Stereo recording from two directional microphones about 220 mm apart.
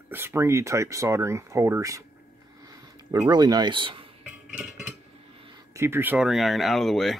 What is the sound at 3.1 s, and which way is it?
Speech, 15° right (ahead or behind).